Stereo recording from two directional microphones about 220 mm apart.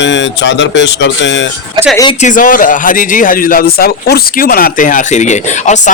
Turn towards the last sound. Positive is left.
turn(degrees=35)  # may be behind; listen again after turning